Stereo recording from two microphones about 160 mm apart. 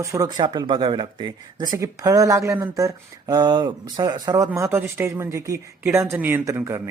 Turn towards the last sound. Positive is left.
turn(degrees=-15)  # may be behind; listen again after turning